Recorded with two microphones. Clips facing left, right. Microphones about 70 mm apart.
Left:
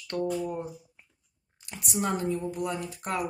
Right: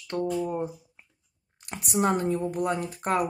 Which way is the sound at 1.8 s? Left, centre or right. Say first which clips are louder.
Right 4 dB; right.